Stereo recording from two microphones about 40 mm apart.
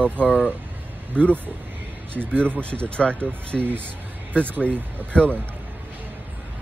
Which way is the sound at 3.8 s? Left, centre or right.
Left.